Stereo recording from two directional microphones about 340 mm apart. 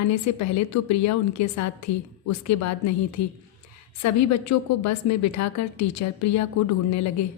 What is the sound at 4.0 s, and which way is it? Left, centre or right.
A woman's voice, left.